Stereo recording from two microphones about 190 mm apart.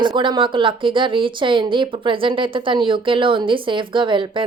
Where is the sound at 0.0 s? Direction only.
25° right (ahead or behind).